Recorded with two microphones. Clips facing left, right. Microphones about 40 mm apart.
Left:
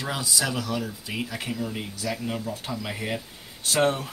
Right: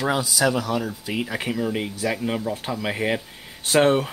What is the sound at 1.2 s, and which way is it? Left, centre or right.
Speech, right.